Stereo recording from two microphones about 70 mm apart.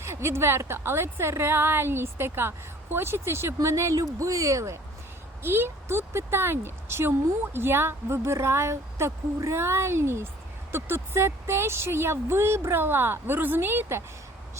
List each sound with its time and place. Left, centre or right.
0.0 s speech: right
5.4 s speech: right